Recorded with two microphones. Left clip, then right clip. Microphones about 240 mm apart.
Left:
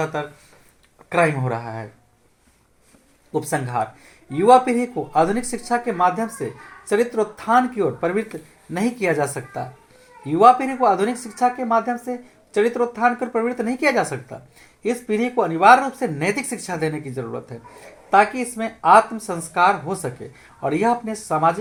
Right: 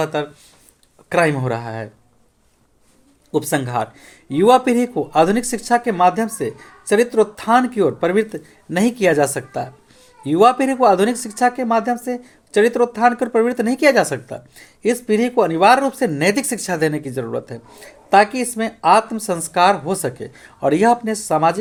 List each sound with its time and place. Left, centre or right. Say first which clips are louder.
0.0 s speech: right 4 dB; right
3.3 s speech: right 3 dB; right
10.2 s speech: even; right